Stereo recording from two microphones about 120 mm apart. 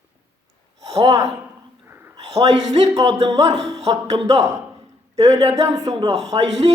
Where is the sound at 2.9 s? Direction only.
30° right (ahead or behind).